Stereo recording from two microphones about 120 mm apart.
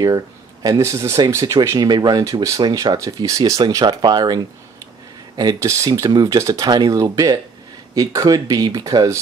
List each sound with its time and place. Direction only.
0.0 s speech: 30° right (ahead or behind)
5.4 s speech: 30° right (ahead or behind)